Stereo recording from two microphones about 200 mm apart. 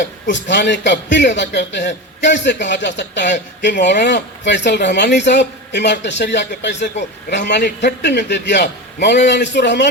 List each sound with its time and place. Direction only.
0.0 s a man's voice: 65° left (ahead or behind)